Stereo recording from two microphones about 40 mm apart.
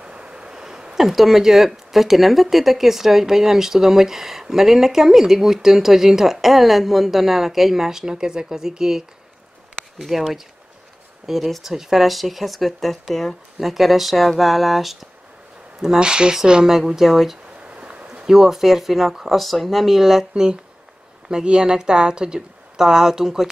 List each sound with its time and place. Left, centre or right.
0.0 s a sound: right
0.9 s speech: centre
13.6 s speech: centre
16.0 s speech: right
16.7 s speech: centre
17.6 s a sound: right
18.2 s speech: centre